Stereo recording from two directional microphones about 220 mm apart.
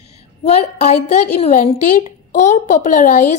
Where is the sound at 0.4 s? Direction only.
30° left (ahead or behind).